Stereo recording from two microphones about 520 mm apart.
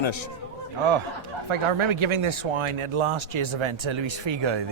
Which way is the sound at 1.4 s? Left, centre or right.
Right.